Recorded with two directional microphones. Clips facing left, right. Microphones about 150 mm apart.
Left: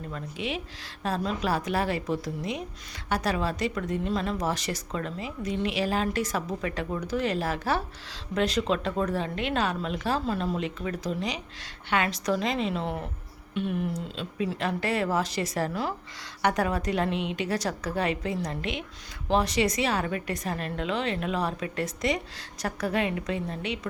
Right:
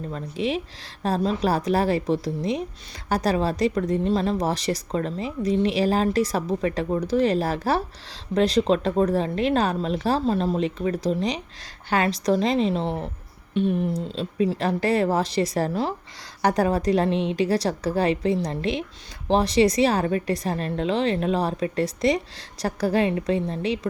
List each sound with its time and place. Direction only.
0.1 s a woman's voice: 35° right (ahead or behind)